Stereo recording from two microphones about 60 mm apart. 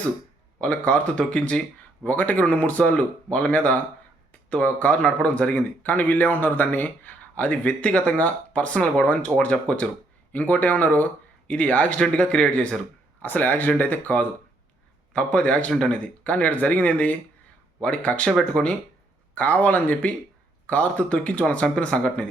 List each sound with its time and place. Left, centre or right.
0.6 s speech: left
13.2 s speech: left